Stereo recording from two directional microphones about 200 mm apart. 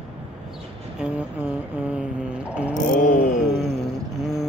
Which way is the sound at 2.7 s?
40° left (ahead or behind).